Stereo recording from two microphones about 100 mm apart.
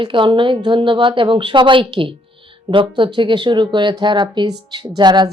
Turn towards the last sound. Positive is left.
turn(degrees=-45)  # may be behind; listen again after turning